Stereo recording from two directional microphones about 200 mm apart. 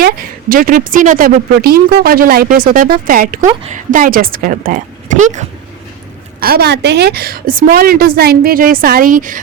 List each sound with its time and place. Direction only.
0.0 s speech: 45° right (ahead or behind)
6.4 s speech: 50° right (ahead or behind)